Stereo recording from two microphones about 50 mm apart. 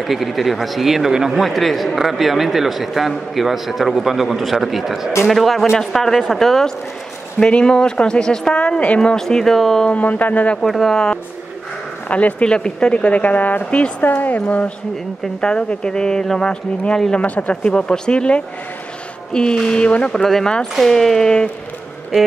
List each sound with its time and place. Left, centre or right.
0.0 s a man's voice: centre
1.4 s a man's voice: centre; by 9.1 s left
9.1 s a man's voice: centre
10.0 s speech: left
10.6 s a man's voice: centre
12.1 s speech: left
15.4 s a man's voice: centre
20.1 s a man's voice: centre